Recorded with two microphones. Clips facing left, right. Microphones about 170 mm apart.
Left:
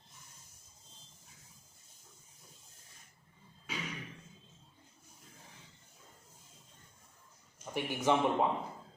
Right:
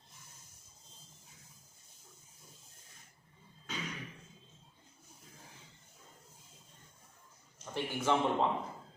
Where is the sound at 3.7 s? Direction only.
10° left (ahead or behind).